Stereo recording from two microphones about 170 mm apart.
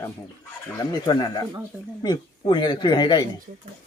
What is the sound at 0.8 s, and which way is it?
A man's voice, 25° left (ahead or behind).